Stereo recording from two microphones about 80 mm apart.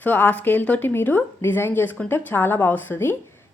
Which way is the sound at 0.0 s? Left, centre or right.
Left.